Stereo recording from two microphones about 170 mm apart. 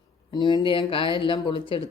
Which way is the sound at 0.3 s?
25° left (ahead or behind).